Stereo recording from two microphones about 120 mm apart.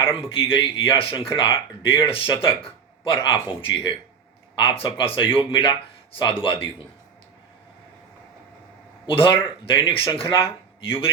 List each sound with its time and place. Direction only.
0.0 s a man's voice: 50° left (ahead or behind)
9.0 s speech: 45° left (ahead or behind)